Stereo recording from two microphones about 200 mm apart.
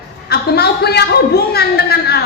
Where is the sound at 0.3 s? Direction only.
50° left (ahead or behind).